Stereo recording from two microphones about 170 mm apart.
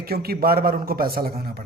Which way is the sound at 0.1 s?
60° right (ahead or behind).